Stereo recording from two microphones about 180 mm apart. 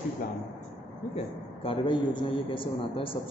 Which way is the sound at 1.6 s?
30° left (ahead or behind).